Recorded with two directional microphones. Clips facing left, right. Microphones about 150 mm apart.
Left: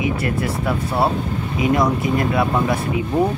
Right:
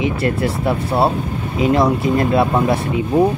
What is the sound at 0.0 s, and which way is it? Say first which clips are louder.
Speech: right 3 dB; 30° right (ahead or behind).